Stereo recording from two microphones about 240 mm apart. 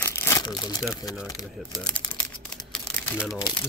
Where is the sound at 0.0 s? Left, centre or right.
Centre.